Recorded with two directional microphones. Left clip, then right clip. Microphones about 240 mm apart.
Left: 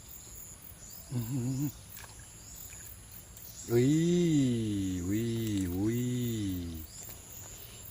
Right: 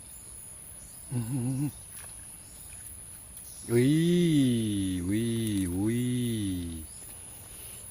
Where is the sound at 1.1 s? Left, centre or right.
Right.